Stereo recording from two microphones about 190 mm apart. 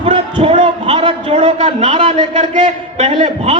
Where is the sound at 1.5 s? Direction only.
40° right (ahead or behind).